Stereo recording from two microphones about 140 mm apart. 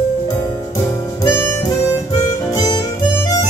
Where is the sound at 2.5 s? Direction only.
25° left (ahead or behind).